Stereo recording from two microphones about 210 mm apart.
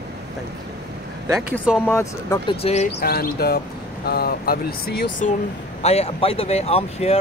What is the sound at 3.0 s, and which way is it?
Speech, 45° left (ahead or behind).